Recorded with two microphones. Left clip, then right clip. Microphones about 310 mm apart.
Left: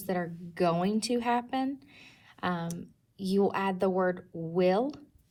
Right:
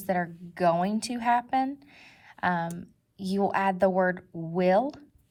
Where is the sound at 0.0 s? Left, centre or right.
Centre.